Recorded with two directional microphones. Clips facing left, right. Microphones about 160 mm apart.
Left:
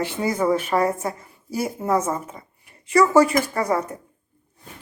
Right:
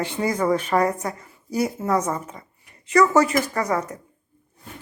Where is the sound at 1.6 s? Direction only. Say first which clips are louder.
Left 1 dB; 25° left (ahead or behind).